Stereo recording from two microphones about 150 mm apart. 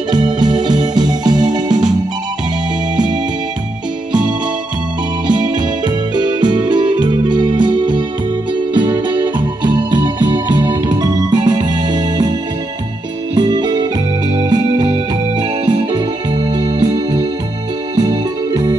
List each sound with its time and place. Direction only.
0.1 s organ: 30° right (ahead or behind)
5.2 s music: 30° right (ahead or behind)
8.7 s keyboard: 30° right (ahead or behind)
13.3 s organ: 30° right (ahead or behind)
14.4 s music: 25° right (ahead or behind)
15.6 s keyboard: 30° right (ahead or behind)